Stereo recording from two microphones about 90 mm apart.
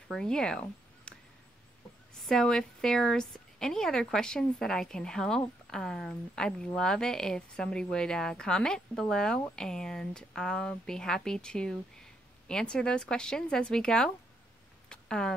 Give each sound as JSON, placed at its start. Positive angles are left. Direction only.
{"t": 0.1, "sound": "speech", "side_deg": 5}
{"t": 2.1, "sound": "speech", "side_deg": 5}
{"t": 14.9, "sound": "a sound", "side_deg": 10}